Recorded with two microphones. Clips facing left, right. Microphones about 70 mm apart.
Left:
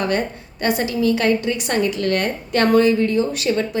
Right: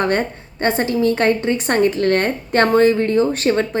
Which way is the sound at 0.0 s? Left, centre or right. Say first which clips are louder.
Right 3 dB; right.